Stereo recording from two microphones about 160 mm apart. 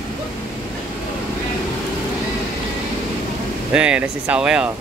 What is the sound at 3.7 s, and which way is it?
Speech, 5° right (ahead or behind).